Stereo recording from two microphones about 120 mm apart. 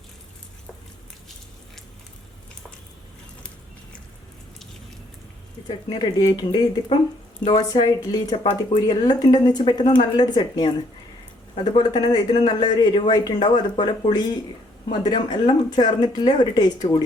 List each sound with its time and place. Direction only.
5.6 s speech: 35° left (ahead or behind)